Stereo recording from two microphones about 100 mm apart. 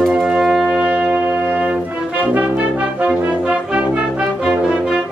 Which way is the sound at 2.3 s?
15° right (ahead or behind).